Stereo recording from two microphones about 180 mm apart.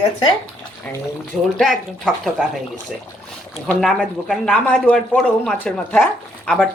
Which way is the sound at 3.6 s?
5° left (ahead or behind).